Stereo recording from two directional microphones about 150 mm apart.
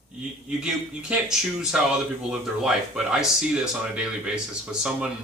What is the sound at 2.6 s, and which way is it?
Speech, 5° right (ahead or behind).